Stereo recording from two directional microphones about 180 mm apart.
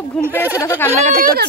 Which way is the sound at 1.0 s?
50° right (ahead or behind).